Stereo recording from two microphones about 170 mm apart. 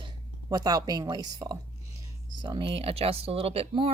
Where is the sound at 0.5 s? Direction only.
25° right (ahead or behind).